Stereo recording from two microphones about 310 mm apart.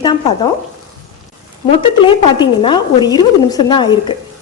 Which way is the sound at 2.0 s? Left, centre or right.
Centre.